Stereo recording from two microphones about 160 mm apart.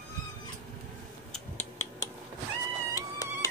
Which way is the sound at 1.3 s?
10° left (ahead or behind).